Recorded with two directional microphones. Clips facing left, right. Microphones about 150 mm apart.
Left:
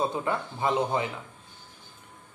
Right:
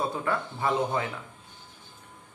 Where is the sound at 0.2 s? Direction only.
20° left (ahead or behind).